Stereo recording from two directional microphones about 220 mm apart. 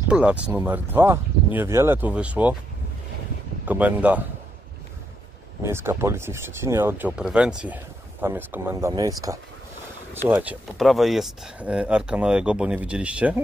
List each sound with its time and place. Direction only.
0.1 s speech: 5° right (ahead or behind)
3.6 s speech: 5° right (ahead or behind)
5.6 s speech: 10° right (ahead or behind)